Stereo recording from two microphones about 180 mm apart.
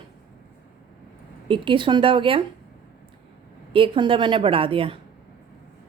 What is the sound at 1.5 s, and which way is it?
Speech, 25° right (ahead or behind).